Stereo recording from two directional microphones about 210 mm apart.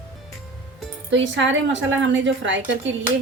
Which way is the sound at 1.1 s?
60° right (ahead or behind).